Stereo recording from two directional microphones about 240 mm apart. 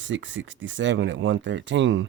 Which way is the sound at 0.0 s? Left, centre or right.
Right.